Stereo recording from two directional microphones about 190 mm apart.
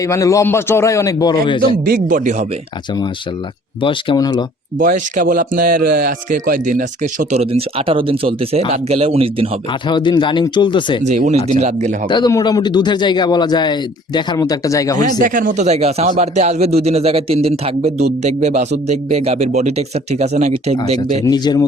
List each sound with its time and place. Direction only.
0.1 s a man's voice: 15° left (ahead or behind)
1.8 s speech: 45° right (ahead or behind)
3.8 s a man's voice: 25° left (ahead or behind)
4.8 s a man's voice: 45° right (ahead or behind)
9.9 s a man's voice: 25° left (ahead or behind)
11.0 s a man's voice: 40° right (ahead or behind)
12.0 s a man's voice: 25° left (ahead or behind)
15.2 s a man's voice: 45° right (ahead or behind)
21.2 s a man's voice: 20° left (ahead or behind)